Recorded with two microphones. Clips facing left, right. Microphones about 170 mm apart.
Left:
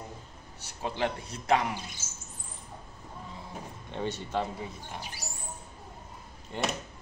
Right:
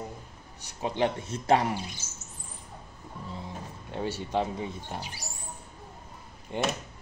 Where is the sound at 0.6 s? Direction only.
15° right (ahead or behind).